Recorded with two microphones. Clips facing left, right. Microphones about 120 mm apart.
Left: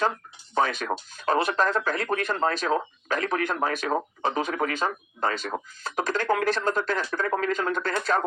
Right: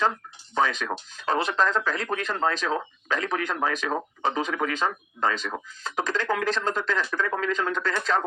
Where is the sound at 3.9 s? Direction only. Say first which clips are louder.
Left 1 dB; 40° left (ahead or behind).